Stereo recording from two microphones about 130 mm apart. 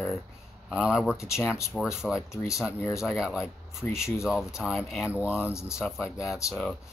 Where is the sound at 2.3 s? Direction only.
25° left (ahead or behind).